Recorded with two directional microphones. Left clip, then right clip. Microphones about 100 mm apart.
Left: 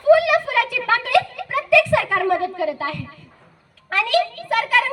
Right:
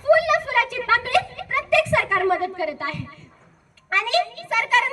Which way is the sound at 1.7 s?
40° right (ahead or behind).